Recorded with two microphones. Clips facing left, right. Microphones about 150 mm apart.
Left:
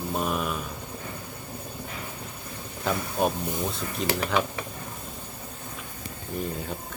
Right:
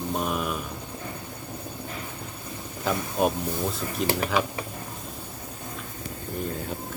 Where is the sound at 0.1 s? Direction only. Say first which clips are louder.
Left 1 dB; centre (ahead or behind).